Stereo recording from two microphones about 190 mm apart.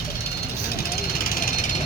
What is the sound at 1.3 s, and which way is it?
Jackhammer, 45° left (ahead or behind).